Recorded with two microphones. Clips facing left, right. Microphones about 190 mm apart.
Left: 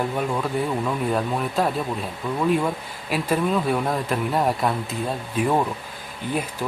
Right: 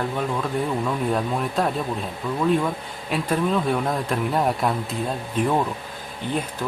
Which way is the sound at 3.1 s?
5° left (ahead or behind).